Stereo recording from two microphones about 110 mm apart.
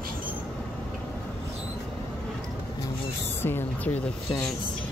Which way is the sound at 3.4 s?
15° left (ahead or behind).